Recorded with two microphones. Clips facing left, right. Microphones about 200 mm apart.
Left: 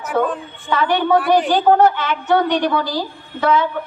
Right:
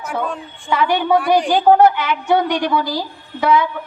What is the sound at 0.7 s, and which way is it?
A man's voice, 10° right (ahead or behind).